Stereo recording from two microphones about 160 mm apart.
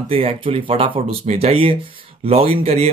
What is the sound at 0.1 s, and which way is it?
Speech, 35° right (ahead or behind).